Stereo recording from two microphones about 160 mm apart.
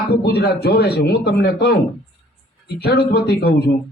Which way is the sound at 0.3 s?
90° left.